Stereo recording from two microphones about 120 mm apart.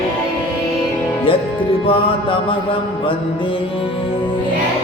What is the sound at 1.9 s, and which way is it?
Music, 45° left (ahead or behind).